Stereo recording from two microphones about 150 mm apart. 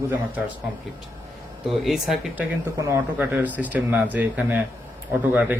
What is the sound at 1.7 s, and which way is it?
Speech, centre (ahead or behind).